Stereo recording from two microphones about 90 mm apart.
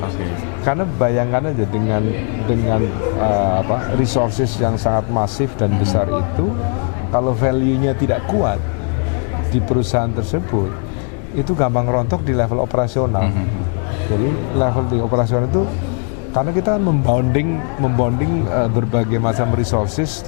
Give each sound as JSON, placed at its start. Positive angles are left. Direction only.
{"t": 0.6, "sound": "speech", "side_deg": 20}
{"t": 2.5, "sound": "speech", "side_deg": 20}
{"t": 9.6, "sound": "speech", "side_deg": 15}
{"t": 14.5, "sound": "speech", "side_deg": 20}